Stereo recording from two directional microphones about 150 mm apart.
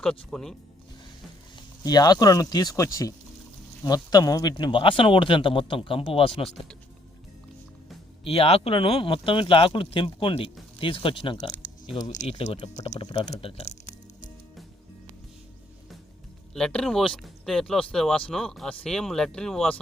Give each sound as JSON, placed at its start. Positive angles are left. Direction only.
{"t": 0.3, "sound": "speech", "side_deg": 5}
{"t": 1.8, "sound": "speech", "side_deg": 25}
{"t": 8.2, "sound": "speech", "side_deg": 40}
{"t": 12.0, "sound": "speech", "side_deg": 45}
{"t": 13.0, "sound": "speech", "side_deg": 35}
{"t": 13.3, "sound": "music", "side_deg": 40}
{"t": 16.6, "sound": "speech", "side_deg": 5}